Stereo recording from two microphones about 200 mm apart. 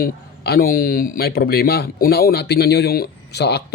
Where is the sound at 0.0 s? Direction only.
50° left (ahead or behind).